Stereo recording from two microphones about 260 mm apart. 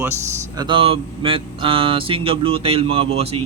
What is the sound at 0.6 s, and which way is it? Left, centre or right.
Speech, centre.